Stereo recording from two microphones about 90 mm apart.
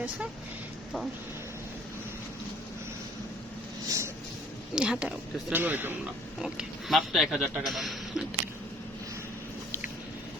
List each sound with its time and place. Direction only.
3.8 s a sound: 35° right (ahead or behind)
4.7 s speech: 10° right (ahead or behind)
6.4 s speech: 5° right (ahead or behind)